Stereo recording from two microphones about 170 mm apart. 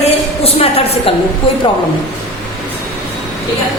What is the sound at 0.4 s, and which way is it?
Speech, 35° left (ahead or behind).